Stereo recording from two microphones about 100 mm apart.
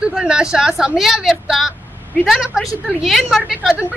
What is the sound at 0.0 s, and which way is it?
A woman's voice, 5° right (ahead or behind).